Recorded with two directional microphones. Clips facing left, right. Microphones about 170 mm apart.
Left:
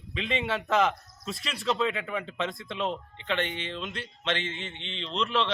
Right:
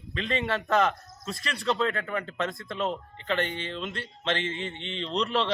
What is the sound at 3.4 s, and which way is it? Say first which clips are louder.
Speech: right 1 dB; 35° right (ahead or behind).